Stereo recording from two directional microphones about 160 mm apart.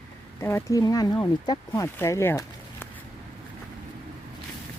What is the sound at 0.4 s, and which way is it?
Speech, 20° left (ahead or behind).